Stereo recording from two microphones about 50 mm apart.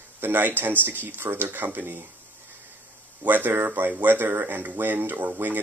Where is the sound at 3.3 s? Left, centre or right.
Right.